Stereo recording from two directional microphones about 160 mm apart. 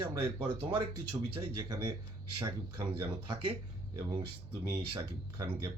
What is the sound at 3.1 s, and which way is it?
Speech, 30° right (ahead or behind).